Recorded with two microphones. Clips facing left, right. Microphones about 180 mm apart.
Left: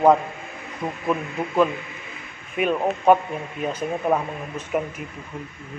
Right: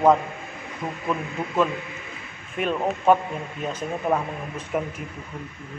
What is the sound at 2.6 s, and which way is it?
Mantra, 10° left (ahead or behind).